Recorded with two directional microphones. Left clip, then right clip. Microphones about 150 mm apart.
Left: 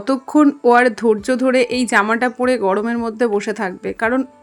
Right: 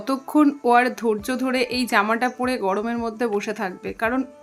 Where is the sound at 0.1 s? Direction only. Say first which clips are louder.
Left 5 dB; 30° left (ahead or behind).